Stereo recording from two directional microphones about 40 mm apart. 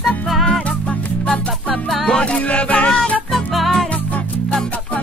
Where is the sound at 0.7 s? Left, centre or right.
Left.